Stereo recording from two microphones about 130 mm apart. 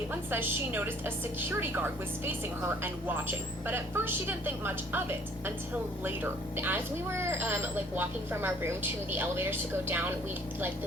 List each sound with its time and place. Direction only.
0.1 s a woman's voice: 15° right (ahead or behind)
6.1 s a woman's voice: 15° right (ahead or behind)